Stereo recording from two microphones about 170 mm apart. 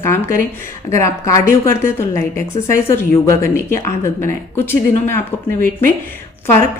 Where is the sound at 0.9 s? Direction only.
15° left (ahead or behind).